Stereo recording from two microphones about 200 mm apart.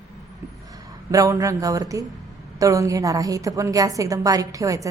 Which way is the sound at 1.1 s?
15° right (ahead or behind).